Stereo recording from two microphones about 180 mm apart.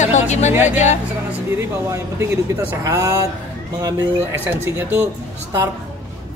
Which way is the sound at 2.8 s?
15° right (ahead or behind).